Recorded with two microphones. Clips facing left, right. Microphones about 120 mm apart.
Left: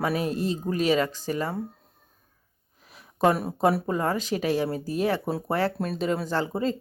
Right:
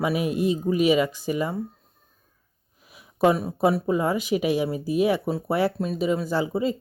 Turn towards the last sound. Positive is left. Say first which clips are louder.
# right 2 dB
turn(degrees=-10)  # may be behind; listen again after turning